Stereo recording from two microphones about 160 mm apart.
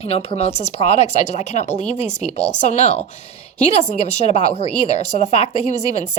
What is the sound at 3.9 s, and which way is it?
A woman's voice, 45° left (ahead or behind).